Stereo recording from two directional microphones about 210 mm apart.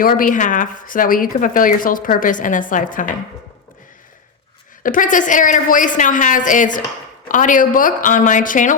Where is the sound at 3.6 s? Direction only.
40° left (ahead or behind).